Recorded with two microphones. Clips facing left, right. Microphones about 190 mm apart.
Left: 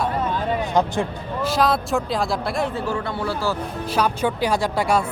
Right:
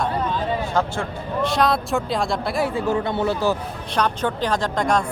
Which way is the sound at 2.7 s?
20° right (ahead or behind).